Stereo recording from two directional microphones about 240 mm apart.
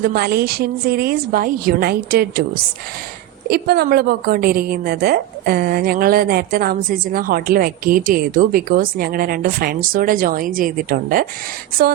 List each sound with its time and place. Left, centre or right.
0.0 s a woman's voice: right
3.5 s a woman's voice: right